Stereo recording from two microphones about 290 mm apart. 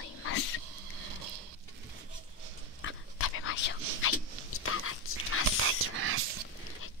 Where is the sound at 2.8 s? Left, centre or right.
Left.